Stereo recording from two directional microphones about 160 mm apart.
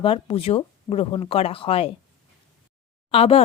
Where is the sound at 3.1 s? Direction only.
35° left (ahead or behind).